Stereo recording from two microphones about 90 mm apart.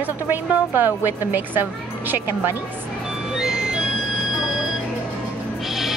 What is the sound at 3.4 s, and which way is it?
Music, 5° right (ahead or behind).